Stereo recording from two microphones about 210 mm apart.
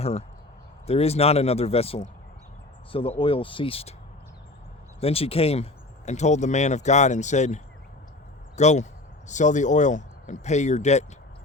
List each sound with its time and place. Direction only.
0.0 s speech: 30° left (ahead or behind)
4.9 s speech: 30° left (ahead or behind)